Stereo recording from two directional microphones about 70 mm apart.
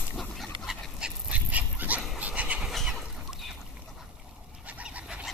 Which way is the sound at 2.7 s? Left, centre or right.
Centre.